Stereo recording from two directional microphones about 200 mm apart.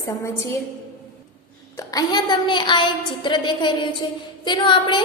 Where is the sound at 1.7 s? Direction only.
20° left (ahead or behind).